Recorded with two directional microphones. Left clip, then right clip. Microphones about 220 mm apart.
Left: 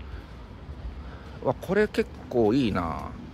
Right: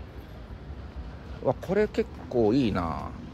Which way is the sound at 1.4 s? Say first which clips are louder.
Left 1 dB; 10° left (ahead or behind).